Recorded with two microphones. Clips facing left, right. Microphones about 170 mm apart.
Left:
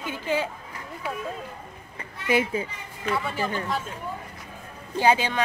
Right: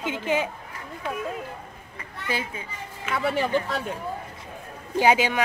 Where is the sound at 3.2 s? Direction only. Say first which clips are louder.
Right 5 dB; 75° right (ahead or behind).